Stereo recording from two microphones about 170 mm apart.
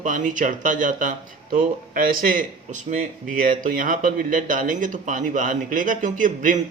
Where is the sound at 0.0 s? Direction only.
50° right (ahead or behind).